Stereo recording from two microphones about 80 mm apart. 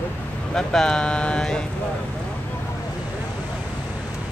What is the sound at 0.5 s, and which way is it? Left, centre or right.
Speech, centre.